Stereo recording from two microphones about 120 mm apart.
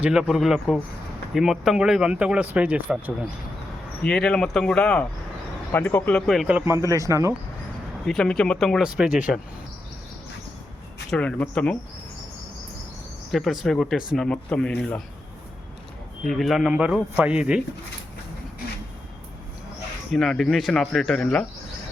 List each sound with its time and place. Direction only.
0.0 s speech: 5° right (ahead or behind)
4.0 s speech: 10° left (ahead or behind)
5.7 s speech: 15° left (ahead or behind)
6.1 s speech: centre (ahead or behind)
6.5 s speech: 20° right (ahead or behind)
8.0 s speech: 5° left (ahead or behind)
11.1 s speech: 10° left (ahead or behind)
13.3 s speech: centre (ahead or behind)
16.2 s speech: centre (ahead or behind)
20.1 s speech: centre (ahead or behind)